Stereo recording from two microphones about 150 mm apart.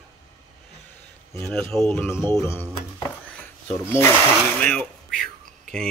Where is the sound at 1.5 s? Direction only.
5° left (ahead or behind).